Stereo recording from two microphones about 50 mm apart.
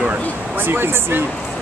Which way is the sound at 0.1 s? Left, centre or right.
Right.